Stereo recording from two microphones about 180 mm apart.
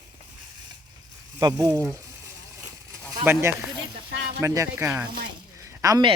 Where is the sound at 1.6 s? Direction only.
20° right (ahead or behind).